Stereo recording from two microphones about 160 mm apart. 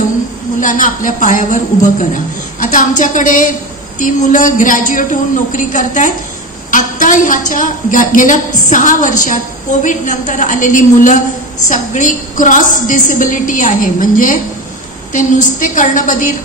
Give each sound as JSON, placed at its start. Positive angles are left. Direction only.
{"t": 0.6, "sound": "a woman's voice", "side_deg": 55}